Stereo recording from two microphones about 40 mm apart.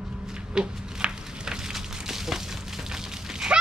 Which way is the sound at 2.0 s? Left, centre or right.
Centre.